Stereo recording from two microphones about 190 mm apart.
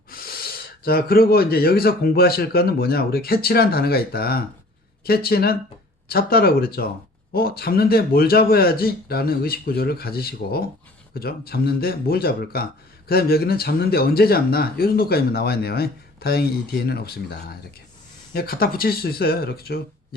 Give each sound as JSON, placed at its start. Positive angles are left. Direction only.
{"t": 0.1, "sound": "speech", "side_deg": 50}